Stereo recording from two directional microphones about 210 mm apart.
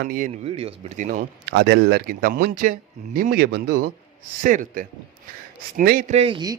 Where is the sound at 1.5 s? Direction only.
55° right (ahead or behind).